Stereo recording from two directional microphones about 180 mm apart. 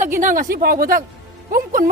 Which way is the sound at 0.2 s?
50° right (ahead or behind).